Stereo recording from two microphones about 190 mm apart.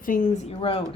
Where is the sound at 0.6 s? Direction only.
30° left (ahead or behind).